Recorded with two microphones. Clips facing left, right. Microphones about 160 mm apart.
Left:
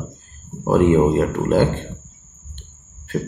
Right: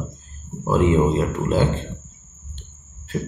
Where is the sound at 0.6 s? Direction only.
60° left (ahead or behind).